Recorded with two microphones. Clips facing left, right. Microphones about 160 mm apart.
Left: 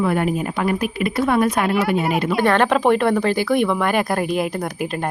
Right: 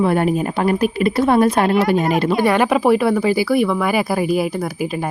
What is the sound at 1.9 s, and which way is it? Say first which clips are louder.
Speech: right 3 dB; 5° left (ahead or behind).